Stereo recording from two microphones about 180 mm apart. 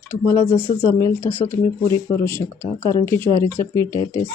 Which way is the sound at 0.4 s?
15° left (ahead or behind).